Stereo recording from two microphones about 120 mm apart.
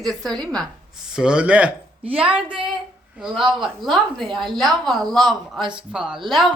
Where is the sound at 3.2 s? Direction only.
Centre (ahead or behind).